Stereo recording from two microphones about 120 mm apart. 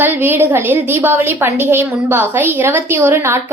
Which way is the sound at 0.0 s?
20° right (ahead or behind).